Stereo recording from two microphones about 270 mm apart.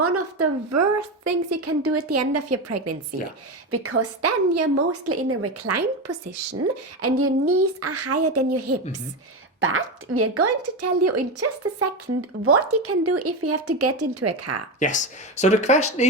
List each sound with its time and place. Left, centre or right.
0.0 s a woman's voice: right
3.7 s a woman's voice: right
9.6 s a woman's voice: right
14.8 s speech: left